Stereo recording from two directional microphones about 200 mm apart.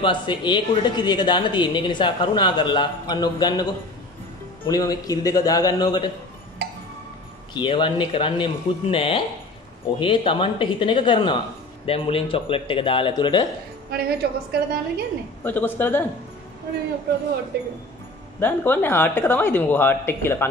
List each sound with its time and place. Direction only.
0.0 s speech: 25° left (ahead or behind)
4.6 s speech: 20° left (ahead or behind)
7.5 s speech: 25° left (ahead or behind)
13.8 s a woman's voice: 50° right (ahead or behind)
15.4 s speech: 10° left (ahead or behind)
17.5 s a woman's voice: 55° right (ahead or behind)
18.4 s speech: 10° left (ahead or behind)